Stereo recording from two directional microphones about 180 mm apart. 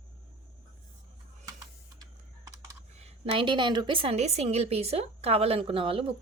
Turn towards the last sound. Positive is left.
turn(degrees=-30)  # may be behind; listen again after turning